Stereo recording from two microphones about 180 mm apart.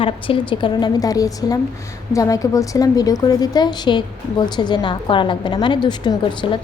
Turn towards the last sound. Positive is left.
turn(degrees=25)  # may be behind; listen again after turning